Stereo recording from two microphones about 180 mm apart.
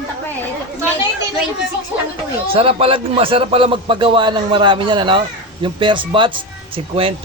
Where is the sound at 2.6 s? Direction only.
30° right (ahead or behind).